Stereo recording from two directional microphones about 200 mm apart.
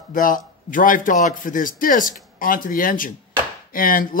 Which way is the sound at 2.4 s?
45° left (ahead or behind).